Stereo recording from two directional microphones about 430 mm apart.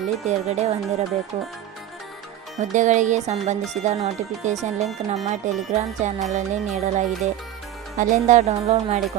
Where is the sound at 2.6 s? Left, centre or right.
Centre.